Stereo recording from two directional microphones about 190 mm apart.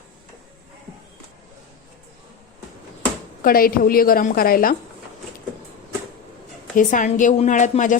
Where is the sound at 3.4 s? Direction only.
50° left (ahead or behind).